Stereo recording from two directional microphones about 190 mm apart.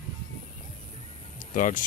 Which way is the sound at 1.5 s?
45° left (ahead or behind).